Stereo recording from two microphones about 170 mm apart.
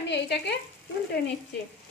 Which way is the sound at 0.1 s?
90° left.